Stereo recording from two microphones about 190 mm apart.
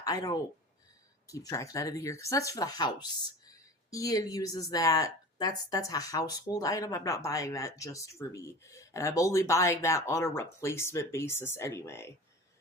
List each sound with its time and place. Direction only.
0.0 s speech: 20° left (ahead or behind)